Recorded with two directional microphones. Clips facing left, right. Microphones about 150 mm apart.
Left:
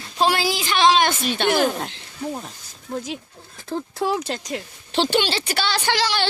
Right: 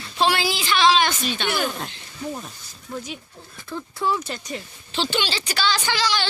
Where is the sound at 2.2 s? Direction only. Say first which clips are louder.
Left 2 dB; 30° left (ahead or behind).